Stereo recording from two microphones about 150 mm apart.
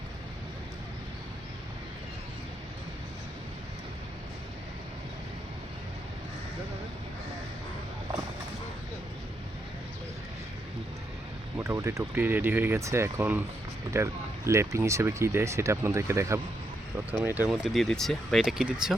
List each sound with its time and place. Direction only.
11.5 s speech: 20° right (ahead or behind); by 18.9 s 5° right (ahead or behind)